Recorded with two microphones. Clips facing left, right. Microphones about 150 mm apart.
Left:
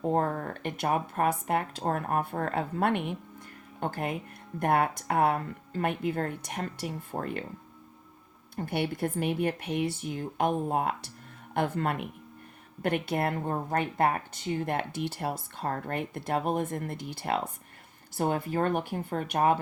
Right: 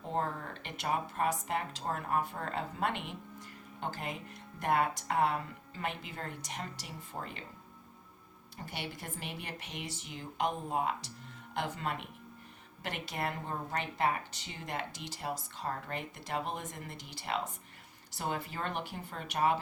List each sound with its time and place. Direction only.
0.0 s speech: 50° left (ahead or behind)
8.5 s speech: 55° left (ahead or behind)